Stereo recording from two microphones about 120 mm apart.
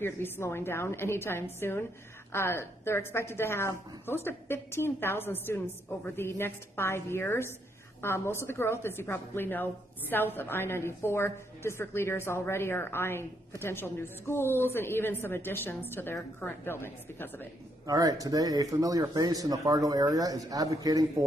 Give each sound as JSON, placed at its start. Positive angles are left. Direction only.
{"t": 0.0, "sound": "a woman's voice", "side_deg": 20}
{"t": 17.8, "sound": "speech", "side_deg": -30}